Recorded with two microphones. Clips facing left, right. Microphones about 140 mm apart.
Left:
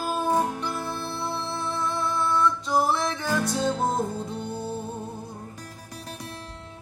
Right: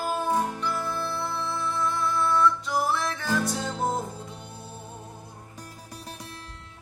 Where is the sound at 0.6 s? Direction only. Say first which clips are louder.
Right 1 dB; 25° left (ahead or behind).